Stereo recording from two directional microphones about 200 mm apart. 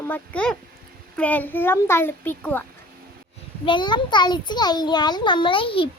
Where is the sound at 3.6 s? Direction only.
25° left (ahead or behind).